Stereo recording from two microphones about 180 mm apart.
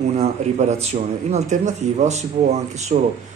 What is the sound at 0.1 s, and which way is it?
Speech, 40° right (ahead or behind).